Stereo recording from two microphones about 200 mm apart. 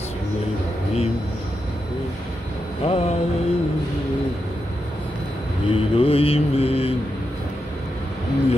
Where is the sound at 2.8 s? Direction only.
30° left (ahead or behind).